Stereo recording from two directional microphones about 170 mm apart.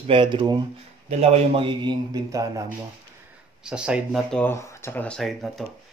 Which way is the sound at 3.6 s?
5° right (ahead or behind).